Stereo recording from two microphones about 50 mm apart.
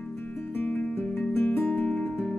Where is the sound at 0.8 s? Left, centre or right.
Left.